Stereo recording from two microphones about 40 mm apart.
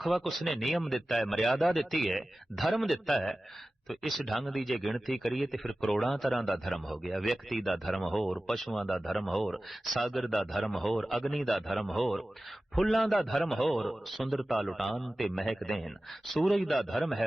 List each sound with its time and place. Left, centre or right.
0.0 s speech: centre